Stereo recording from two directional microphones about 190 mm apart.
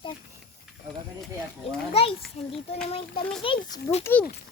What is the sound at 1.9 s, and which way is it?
Children playing, 30° left (ahead or behind).